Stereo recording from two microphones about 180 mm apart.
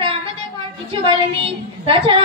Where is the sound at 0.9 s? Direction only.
30° right (ahead or behind).